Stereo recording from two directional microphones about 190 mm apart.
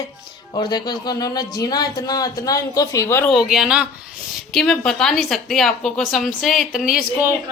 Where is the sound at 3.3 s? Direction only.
Centre (ahead or behind).